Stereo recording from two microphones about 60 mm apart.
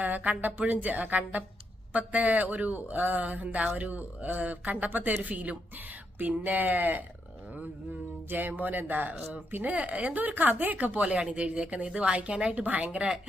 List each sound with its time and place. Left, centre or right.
0.0 s speech: right
8.3 s speech: right